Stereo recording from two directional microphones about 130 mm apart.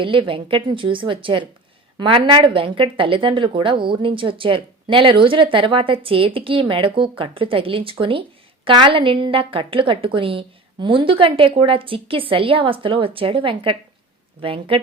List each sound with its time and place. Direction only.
0.0 s a woman's voice: 40° right (ahead or behind)